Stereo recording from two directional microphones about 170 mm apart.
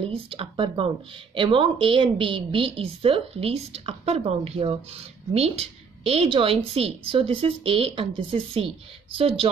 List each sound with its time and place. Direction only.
0.0 s speech: 35° right (ahead or behind)